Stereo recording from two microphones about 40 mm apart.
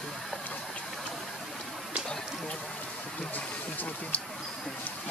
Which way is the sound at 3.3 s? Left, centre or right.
Left.